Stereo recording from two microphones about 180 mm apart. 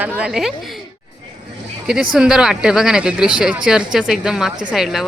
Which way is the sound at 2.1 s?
5° right (ahead or behind).